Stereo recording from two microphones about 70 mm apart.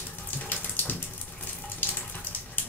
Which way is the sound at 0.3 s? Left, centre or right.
Left.